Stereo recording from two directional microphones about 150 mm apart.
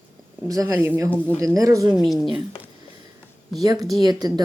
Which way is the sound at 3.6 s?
25° right (ahead or behind).